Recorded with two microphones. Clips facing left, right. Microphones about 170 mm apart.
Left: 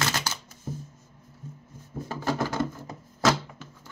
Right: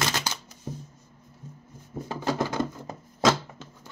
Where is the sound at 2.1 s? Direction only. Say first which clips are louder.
Right 1 dB; 20° right (ahead or behind).